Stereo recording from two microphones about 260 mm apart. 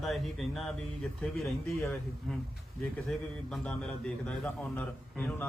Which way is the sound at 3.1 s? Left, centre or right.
Centre.